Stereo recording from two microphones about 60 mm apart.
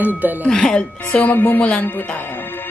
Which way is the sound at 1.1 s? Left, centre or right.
Left.